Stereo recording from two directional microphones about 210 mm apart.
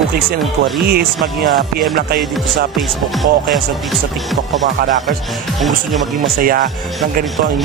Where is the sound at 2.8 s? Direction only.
Centre (ahead or behind).